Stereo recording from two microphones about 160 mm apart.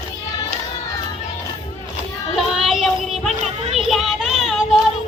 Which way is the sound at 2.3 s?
Centre (ahead or behind).